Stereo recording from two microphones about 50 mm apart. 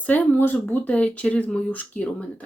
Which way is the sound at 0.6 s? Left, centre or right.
Left.